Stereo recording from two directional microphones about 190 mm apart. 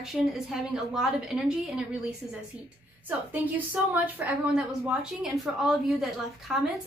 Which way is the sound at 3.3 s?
10° right (ahead or behind).